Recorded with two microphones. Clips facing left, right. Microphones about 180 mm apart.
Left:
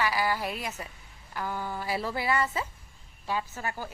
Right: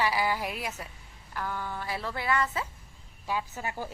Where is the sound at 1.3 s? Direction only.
5° left (ahead or behind).